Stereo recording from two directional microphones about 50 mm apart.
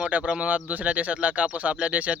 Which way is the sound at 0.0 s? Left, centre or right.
Right.